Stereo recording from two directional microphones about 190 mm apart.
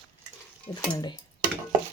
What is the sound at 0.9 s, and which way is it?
Speech, 25° left (ahead or behind).